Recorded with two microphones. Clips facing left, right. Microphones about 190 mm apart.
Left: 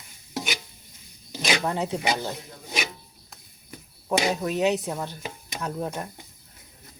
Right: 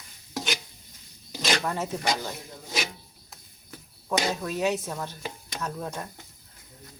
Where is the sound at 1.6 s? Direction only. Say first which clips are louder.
Left 2 dB; 20° left (ahead or behind).